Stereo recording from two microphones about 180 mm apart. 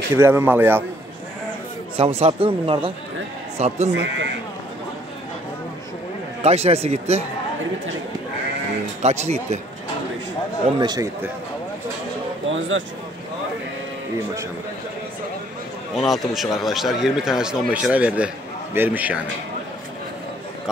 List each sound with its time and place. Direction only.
0.1 s a man's voice: 15° right (ahead or behind)
2.0 s speech: 35° right (ahead or behind)
6.4 s speech: 35° right (ahead or behind)
9.0 s speech: 40° right (ahead or behind)
10.8 s speech: 25° right (ahead or behind)
12.4 s speech: 90° right
16.0 s speech: centre (ahead or behind)